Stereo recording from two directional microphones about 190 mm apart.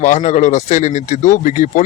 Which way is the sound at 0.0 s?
40° left (ahead or behind).